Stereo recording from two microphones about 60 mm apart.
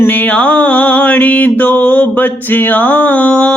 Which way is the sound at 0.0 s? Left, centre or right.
Left.